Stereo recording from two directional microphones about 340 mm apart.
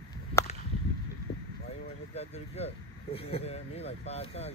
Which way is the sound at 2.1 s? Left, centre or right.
Centre.